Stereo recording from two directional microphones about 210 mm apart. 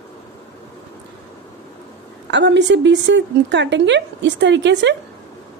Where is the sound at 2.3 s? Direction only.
55° right (ahead or behind).